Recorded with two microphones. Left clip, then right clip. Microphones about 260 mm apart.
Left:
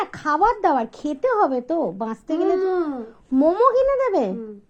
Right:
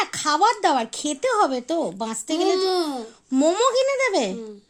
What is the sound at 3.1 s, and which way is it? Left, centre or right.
Speech, right.